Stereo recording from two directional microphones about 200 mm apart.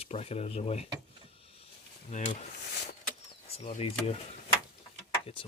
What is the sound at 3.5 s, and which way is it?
Speech, 30° left (ahead or behind).